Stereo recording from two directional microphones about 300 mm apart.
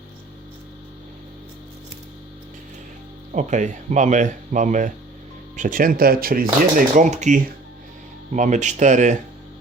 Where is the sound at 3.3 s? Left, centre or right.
Right.